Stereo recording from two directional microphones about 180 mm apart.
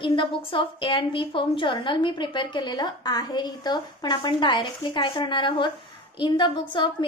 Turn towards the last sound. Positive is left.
turn(degrees=25)  # may be behind; listen again after turning